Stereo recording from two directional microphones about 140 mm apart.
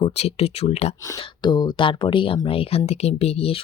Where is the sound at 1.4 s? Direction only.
30° left (ahead or behind).